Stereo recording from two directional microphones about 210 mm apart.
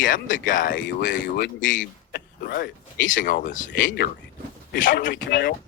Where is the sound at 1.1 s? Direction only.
55° left (ahead or behind).